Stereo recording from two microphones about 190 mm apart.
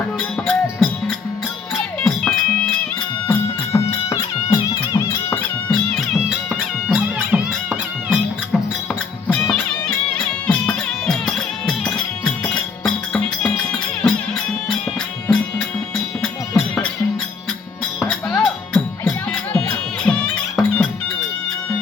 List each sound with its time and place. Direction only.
0.2 s music: 5° left (ahead or behind)
6.2 s music: centre (ahead or behind)
9.2 s music: 5° left (ahead or behind)
12.8 s music: 5° left (ahead or behind)
16.2 s music: 5° left (ahead or behind)
18.0 s music: centre (ahead or behind)